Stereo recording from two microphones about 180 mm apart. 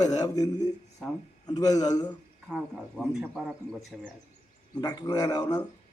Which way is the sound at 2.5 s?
Centre (ahead or behind).